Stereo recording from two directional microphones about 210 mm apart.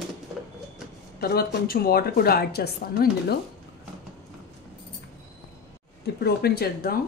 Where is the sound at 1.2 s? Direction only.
50° left (ahead or behind).